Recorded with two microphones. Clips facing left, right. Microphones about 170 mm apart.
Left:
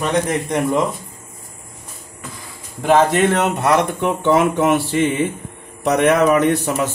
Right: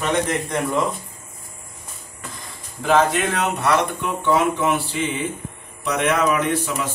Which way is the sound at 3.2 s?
60° left (ahead or behind).